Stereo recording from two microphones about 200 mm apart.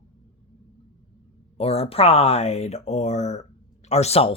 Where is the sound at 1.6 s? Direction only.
30° left (ahead or behind).